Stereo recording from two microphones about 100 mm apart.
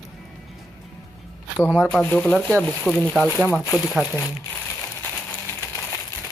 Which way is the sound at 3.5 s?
25° left (ahead or behind).